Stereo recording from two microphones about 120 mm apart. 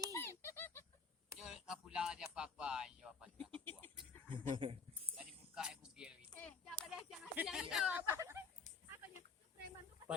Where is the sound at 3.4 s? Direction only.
15° left (ahead or behind).